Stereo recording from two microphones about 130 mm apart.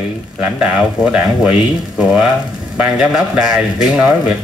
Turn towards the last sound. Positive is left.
turn(degrees=-5)  # may be behind; listen again after turning